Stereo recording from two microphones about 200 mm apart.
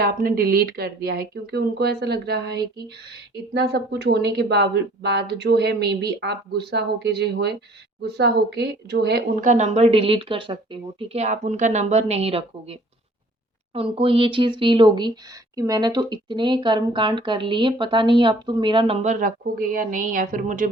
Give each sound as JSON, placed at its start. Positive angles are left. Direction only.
{"t": 0.0, "sound": "speech", "side_deg": -50}
{"t": 9.5, "sound": "a woman's voice", "side_deg": -35}
{"t": 13.7, "sound": "speech", "side_deg": -25}
{"t": 19.0, "sound": "a woman's voice", "side_deg": -40}